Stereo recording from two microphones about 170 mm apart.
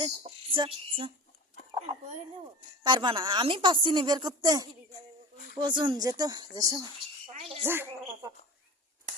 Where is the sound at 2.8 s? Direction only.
25° right (ahead or behind).